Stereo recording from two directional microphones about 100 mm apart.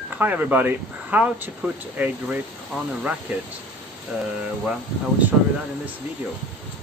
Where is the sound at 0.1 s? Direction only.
20° right (ahead or behind).